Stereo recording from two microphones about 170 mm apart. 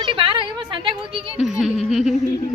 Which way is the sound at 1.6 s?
Centre (ahead or behind).